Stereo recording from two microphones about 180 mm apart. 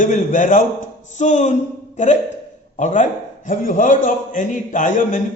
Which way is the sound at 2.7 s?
45° left (ahead or behind).